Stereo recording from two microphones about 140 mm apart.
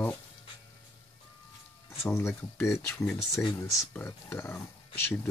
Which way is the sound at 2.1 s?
15° left (ahead or behind).